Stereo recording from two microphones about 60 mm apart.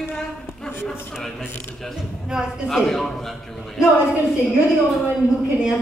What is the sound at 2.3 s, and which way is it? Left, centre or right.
Speech, centre.